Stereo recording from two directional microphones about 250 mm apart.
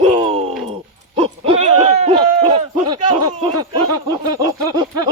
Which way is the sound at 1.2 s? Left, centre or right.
Right.